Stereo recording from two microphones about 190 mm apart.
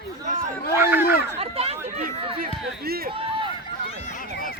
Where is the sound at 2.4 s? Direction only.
50° right (ahead or behind).